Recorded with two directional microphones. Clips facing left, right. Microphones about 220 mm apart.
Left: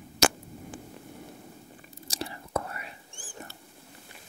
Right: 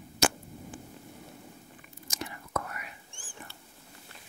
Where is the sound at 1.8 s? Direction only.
35° left (ahead or behind).